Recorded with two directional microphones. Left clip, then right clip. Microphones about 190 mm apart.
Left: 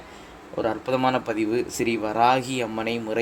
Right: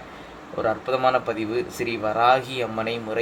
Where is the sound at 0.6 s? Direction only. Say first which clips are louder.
Right 2 dB; 50° left (ahead or behind).